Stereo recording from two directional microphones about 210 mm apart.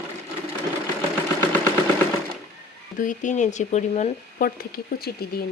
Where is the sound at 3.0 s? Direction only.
40° left (ahead or behind).